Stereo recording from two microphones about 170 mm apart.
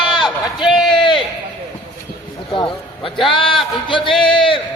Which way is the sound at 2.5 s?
30° left (ahead or behind).